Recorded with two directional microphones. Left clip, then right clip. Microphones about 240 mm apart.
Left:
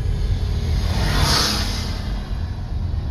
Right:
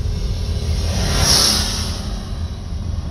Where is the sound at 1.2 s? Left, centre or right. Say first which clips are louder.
Right 5 dB; right.